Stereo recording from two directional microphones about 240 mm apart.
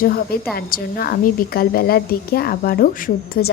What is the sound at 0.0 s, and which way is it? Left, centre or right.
A woman's voice, left.